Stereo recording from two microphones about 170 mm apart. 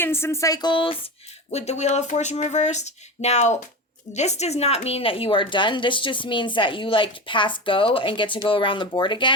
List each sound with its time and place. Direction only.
0.0 s a woman's voice: 15° left (ahead or behind); by 0.9 s 30° left (ahead or behind)
1.5 s a woman's voice: 40° left (ahead or behind)